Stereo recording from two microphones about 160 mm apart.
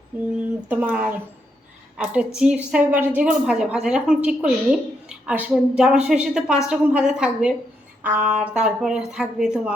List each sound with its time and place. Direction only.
0.3 s a woman's voice: 10° right (ahead or behind)